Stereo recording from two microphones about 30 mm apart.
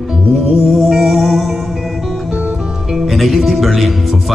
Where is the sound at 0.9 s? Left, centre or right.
Centre.